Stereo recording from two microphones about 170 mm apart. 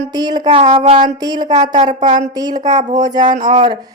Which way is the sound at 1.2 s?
25° right (ahead or behind).